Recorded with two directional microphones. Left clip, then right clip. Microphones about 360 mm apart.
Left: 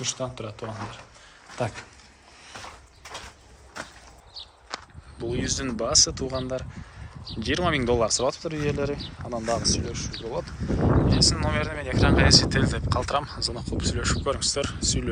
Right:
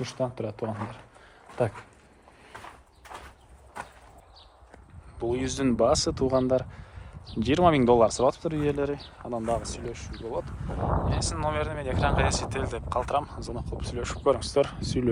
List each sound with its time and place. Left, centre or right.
0.0 s speech: centre
4.4 s horse: centre
5.2 s speech: centre